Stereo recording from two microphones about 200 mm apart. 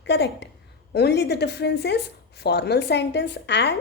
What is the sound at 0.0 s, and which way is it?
A woman's voice, 60° left (ahead or behind).